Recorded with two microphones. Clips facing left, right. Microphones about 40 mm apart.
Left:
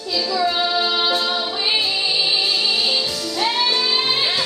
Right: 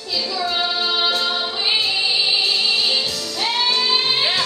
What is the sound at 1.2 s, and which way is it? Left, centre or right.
Music, centre.